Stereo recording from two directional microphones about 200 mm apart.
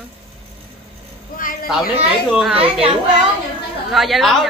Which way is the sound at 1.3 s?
45° left (ahead or behind).